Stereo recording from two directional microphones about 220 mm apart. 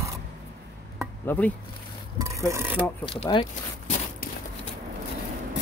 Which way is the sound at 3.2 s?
30° left (ahead or behind).